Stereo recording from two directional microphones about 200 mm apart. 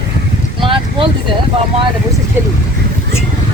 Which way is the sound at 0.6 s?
25° right (ahead or behind).